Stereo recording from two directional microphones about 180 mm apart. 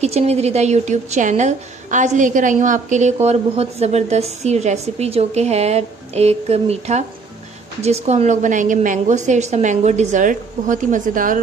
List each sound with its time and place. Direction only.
0.0 s a woman's voice: 35° right (ahead or behind)